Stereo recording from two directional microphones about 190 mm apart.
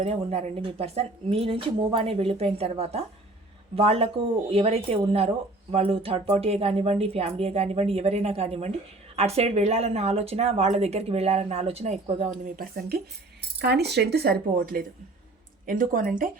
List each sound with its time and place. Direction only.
0.0 s speech: 35° right (ahead or behind); by 13.0 s 50° right (ahead or behind)
13.6 s speech: 60° right (ahead or behind)